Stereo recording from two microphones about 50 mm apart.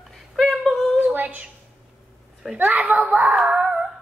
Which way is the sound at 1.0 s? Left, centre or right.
Right.